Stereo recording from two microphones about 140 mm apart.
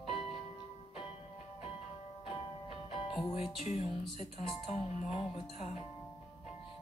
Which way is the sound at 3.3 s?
45° left (ahead or behind).